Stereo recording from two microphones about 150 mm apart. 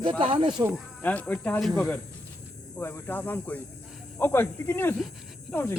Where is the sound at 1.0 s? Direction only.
10° left (ahead or behind).